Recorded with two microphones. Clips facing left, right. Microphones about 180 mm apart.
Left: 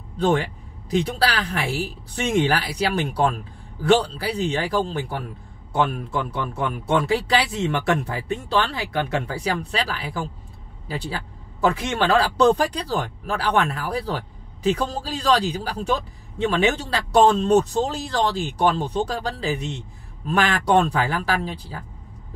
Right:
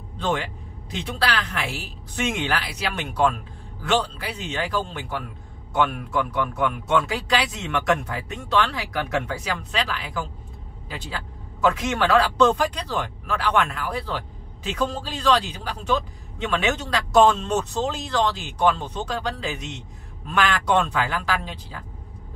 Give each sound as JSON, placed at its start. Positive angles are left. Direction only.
{"t": 0.8, "sound": "speech", "side_deg": 35}
{"t": 11.6, "sound": "speech", "side_deg": 30}